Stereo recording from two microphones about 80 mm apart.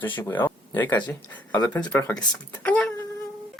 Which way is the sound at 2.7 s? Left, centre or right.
Centre.